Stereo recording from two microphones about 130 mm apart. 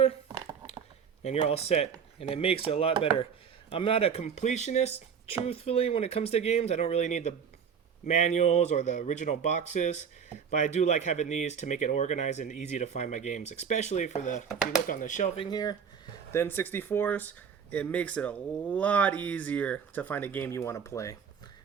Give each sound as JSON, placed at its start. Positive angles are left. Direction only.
{"t": 1.2, "sound": "speech", "side_deg": 55}
{"t": 5.5, "sound": "speech", "side_deg": 50}
{"t": 14.8, "sound": "speech", "side_deg": 85}
{"t": 15.4, "sound": "speech", "side_deg": 30}
{"t": 16.3, "sound": "speech", "side_deg": 20}